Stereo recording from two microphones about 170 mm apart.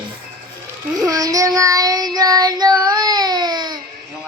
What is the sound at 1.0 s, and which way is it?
Child singing, 20° right (ahead or behind).